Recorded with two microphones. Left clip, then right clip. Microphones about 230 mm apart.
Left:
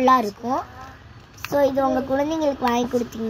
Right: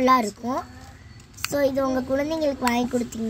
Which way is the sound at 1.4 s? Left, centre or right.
Right.